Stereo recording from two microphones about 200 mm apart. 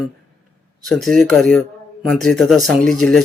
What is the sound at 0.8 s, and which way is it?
Speech, centre (ahead or behind).